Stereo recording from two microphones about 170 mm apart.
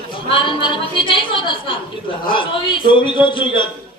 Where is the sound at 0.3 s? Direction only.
30° left (ahead or behind).